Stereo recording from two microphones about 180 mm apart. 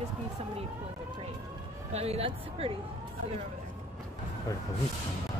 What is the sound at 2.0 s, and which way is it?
Speech, 35° right (ahead or behind).